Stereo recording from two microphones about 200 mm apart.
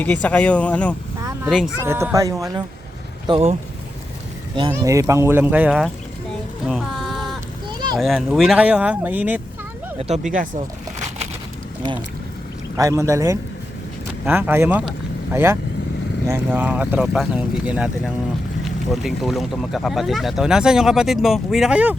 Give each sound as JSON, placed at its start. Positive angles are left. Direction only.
{"t": 0.0, "sound": "speech", "side_deg": 5}
{"t": 1.8, "sound": "speech", "side_deg": -10}
{"t": 3.2, "sound": "speech", "side_deg": -25}
{"t": 4.8, "sound": "speech", "side_deg": -15}
{"t": 6.7, "sound": "music", "side_deg": 0}
{"t": 7.7, "sound": "a sound", "side_deg": -20}
{"t": 7.9, "sound": "speech", "side_deg": 0}
{"t": 10.0, "sound": "speech", "side_deg": -35}
{"t": 12.7, "sound": "speech", "side_deg": -15}